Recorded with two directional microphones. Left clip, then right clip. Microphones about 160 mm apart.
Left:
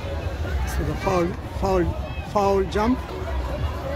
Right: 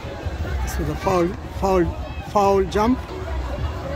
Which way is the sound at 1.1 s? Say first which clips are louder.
Right 3 dB; 35° right (ahead or behind).